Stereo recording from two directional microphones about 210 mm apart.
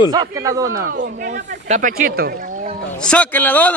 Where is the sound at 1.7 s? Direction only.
40° right (ahead or behind).